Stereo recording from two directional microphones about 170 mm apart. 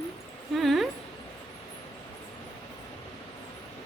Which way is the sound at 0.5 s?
Centre (ahead or behind).